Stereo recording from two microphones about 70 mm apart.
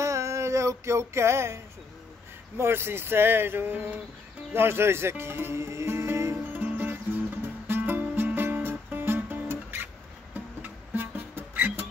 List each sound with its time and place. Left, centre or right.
0.0 s music: right
2.5 s speech: right
6.5 s music: right